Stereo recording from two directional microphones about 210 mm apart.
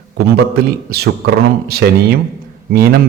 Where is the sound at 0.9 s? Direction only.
50° right (ahead or behind).